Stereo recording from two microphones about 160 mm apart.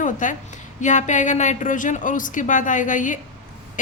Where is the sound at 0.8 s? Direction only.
50° left (ahead or behind).